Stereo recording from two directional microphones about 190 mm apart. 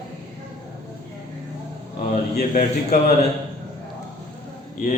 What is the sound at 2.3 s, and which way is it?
Speech, 40° left (ahead or behind).